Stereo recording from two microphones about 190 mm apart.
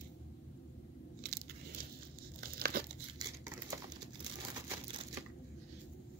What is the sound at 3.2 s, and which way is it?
Crumpling, 20° right (ahead or behind).